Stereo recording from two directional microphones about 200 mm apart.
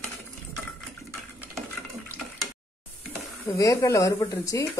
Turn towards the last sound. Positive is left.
turn(degrees=15)  # may be behind; listen again after turning